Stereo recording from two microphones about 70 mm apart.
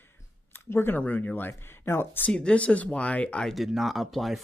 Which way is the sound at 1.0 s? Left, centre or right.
Left.